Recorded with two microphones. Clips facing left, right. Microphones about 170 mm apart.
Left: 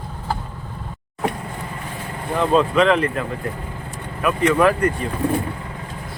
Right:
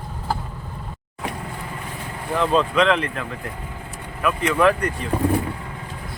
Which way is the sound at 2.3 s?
5° left (ahead or behind).